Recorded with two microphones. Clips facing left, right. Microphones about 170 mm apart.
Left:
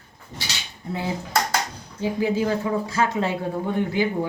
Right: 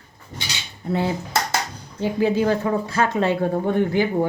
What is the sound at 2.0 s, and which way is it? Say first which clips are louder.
Speech: right 3 dB; 65° right (ahead or behind).